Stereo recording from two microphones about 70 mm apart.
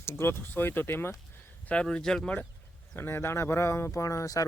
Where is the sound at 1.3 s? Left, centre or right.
Left.